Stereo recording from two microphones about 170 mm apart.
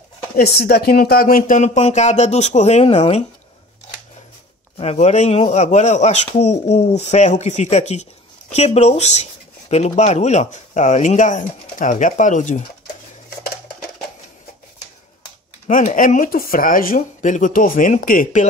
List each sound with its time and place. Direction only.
0.4 s speech: 65° left (ahead or behind); by 3.3 s 40° left (ahead or behind)
4.7 s speech: 40° left (ahead or behind)
15.6 s speech: 45° left (ahead or behind)